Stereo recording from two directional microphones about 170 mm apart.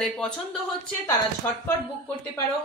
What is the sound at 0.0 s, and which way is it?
Speech, centre (ahead or behind).